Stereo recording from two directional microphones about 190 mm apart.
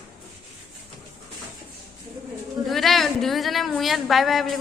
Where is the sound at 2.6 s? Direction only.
Centre (ahead or behind).